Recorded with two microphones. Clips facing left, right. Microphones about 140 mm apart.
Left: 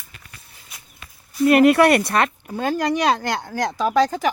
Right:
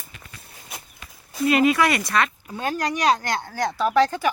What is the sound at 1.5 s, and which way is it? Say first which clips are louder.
Speech: left 6 dB; 65° left (ahead or behind).